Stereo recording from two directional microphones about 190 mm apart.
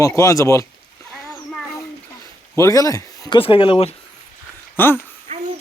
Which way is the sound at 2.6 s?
15° left (ahead or behind).